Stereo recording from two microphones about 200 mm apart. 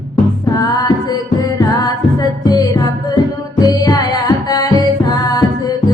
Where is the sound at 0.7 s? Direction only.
20° left (ahead or behind).